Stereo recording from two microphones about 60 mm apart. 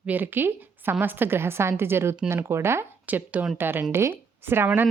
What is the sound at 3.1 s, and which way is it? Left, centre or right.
A woman's voice, right.